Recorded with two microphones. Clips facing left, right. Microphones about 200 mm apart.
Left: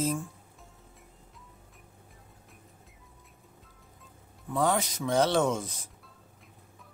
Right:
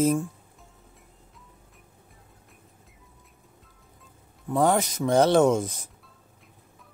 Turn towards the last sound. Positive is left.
turn(degrees=-45)  # may be behind; listen again after turning